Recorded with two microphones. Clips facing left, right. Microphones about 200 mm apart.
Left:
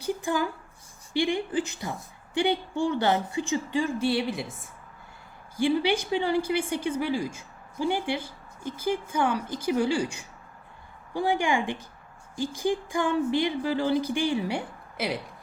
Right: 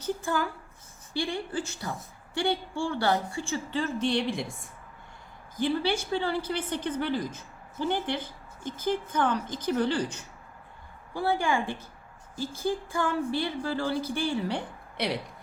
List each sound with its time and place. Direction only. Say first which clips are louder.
0.0 s a sound: left 2 dB; 15° left (ahead or behind)
1.1 s speech: left 5 dB; 15° left (ahead or behind)
5.5 s speech: left 3 dB; 15° left (ahead or behind)